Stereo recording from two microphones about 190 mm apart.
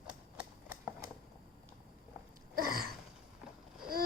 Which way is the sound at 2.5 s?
50° right (ahead or behind).